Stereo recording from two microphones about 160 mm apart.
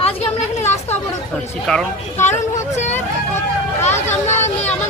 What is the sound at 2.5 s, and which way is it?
Vehicle, 45° left (ahead or behind).